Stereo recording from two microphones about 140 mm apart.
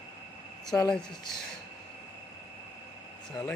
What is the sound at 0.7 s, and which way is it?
Speech, 15° left (ahead or behind).